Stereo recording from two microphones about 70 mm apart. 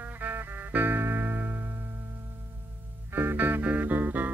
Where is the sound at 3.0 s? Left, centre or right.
Right.